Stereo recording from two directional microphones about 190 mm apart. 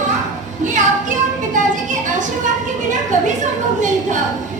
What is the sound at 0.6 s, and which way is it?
Music, 40° right (ahead or behind).